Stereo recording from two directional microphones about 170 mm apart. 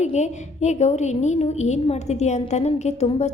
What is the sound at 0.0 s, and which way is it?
A woman's voice, 45° left (ahead or behind).